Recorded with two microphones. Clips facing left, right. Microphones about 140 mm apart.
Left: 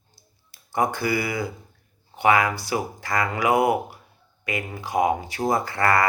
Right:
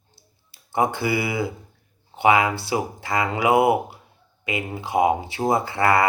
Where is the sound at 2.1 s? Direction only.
25° right (ahead or behind).